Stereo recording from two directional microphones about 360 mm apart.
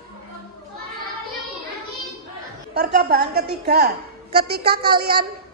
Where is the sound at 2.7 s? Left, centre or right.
Right.